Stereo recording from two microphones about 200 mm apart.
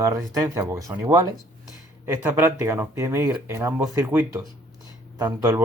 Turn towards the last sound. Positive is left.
turn(degrees=-15)  # may be behind; listen again after turning